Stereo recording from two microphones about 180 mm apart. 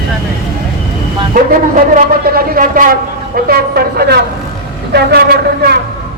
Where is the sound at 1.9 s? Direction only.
55° right (ahead or behind).